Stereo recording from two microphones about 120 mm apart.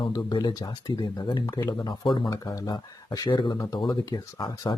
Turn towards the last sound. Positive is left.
turn(degrees=35)  # may be behind; listen again after turning